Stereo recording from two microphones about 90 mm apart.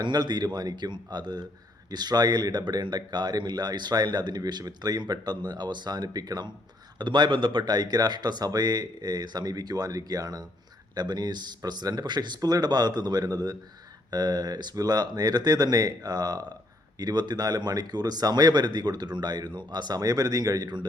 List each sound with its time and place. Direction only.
0.0 s speech: 55° right (ahead or behind)
7.0 s speech: 60° right (ahead or behind)